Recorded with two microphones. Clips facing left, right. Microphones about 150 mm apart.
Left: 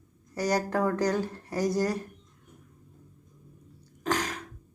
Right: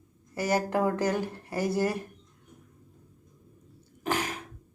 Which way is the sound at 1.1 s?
20° right (ahead or behind).